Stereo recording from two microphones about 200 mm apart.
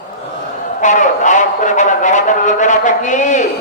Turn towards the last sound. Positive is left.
turn(degrees=35)  # may be behind; listen again after turning